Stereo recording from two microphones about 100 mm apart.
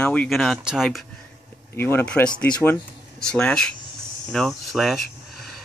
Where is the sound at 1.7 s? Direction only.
25° left (ahead or behind).